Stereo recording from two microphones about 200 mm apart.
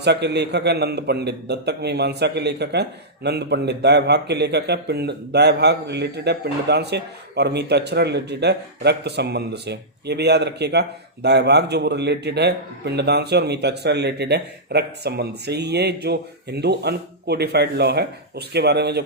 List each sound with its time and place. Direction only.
0.0 s speech: 55° right (ahead or behind)